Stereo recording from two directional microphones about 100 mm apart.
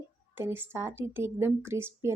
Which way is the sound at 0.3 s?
20° right (ahead or behind).